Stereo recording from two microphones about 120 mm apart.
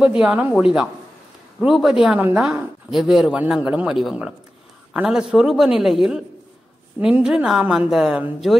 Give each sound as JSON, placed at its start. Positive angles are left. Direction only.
{"t": 0.0, "sound": "speech", "side_deg": -10}